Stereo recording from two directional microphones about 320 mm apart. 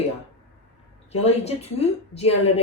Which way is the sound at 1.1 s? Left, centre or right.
Centre.